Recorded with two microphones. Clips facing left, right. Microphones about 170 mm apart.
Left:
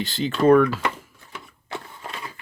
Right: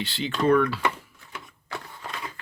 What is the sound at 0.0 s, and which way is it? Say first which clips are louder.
Speech: left 5 dB; 45° left (ahead or behind).